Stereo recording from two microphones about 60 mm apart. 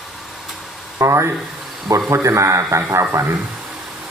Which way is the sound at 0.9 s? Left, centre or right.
Right.